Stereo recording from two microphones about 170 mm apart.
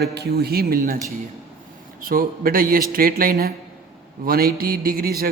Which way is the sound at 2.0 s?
55° right (ahead or behind).